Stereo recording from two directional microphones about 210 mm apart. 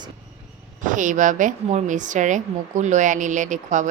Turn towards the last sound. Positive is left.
turn(degrees=-35)  # may be behind; listen again after turning